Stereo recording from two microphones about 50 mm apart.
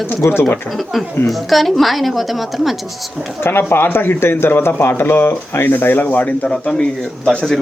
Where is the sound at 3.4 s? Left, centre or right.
Left.